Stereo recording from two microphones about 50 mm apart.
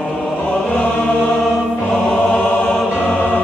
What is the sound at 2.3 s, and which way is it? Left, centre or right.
Choir, left.